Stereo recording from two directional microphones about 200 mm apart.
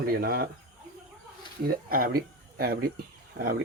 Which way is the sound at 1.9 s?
45° right (ahead or behind).